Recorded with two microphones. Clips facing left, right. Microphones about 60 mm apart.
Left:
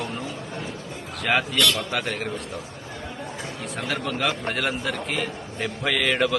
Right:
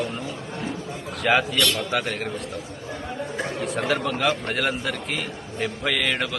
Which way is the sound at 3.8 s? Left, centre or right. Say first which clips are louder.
Right 2 dB; centre.